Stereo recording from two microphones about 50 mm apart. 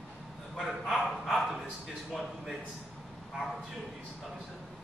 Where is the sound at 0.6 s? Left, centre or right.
Centre.